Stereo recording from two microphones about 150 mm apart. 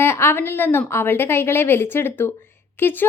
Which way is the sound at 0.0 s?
15° left (ahead or behind).